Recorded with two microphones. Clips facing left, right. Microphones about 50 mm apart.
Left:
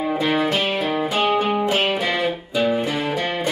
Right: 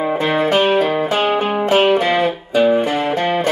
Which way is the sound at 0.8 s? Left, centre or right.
Right.